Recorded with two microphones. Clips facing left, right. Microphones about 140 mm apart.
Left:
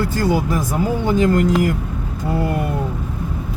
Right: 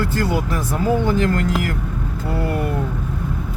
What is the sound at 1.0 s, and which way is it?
Speech, 15° left (ahead or behind).